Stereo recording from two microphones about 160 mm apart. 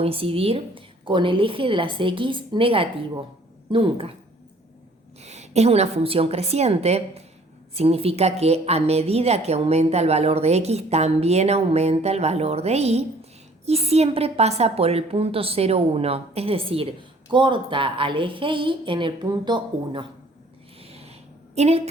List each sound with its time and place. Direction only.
0.0 s a woman's voice: 35° right (ahead or behind)
5.2 s a woman's voice: 45° right (ahead or behind)
20.8 s a sound: 40° right (ahead or behind)